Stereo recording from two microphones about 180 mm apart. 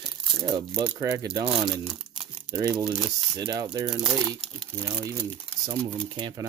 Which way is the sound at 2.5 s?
25° right (ahead or behind).